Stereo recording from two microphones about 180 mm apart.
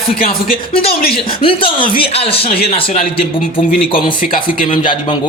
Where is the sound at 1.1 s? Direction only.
30° left (ahead or behind).